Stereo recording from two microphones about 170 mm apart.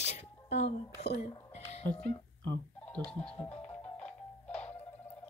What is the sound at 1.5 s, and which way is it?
Music, 40° left (ahead or behind).